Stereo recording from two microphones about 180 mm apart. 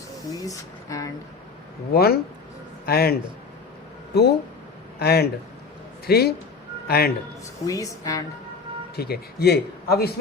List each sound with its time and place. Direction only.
0.3 s speech: 20° left (ahead or behind)
1.9 s a man's voice: 60° left (ahead or behind)
7.6 s speech: 20° left (ahead or behind)
9.0 s a man's voice: 60° left (ahead or behind)